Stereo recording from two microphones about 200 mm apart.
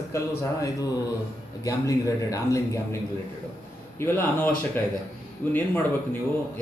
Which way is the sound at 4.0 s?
10° left (ahead or behind).